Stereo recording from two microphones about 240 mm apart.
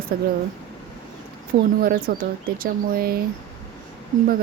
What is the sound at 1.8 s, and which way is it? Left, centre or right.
Speech, right.